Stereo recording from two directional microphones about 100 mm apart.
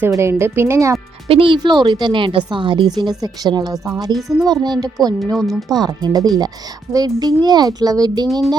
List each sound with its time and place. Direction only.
0.2 s speech: 25° right (ahead or behind)
1.3 s a woman's voice: 60° right (ahead or behind); by 3.8 s 40° right (ahead or behind)
4.1 s speech: centre (ahead or behind)
4.4 s a woman's voice: 45° right (ahead or behind)
5.2 s speech: 5° left (ahead or behind)
5.7 s a woman's voice: 45° right (ahead or behind)
8.3 s speech: centre (ahead or behind)